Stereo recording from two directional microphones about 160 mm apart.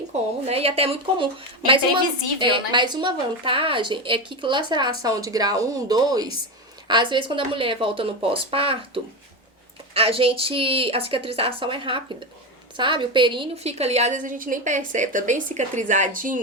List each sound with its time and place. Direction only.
0.4 s a woman's voice: 40° right (ahead or behind)
9.9 s a woman's voice: 35° right (ahead or behind); by 16.4 s 55° right (ahead or behind)